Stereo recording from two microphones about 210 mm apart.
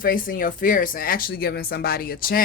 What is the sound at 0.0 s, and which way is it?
Speech, 40° left (ahead or behind).